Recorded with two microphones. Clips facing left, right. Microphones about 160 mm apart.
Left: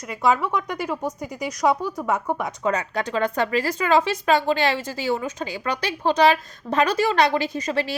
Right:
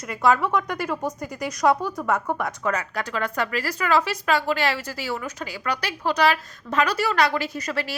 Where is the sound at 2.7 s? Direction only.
30° left (ahead or behind).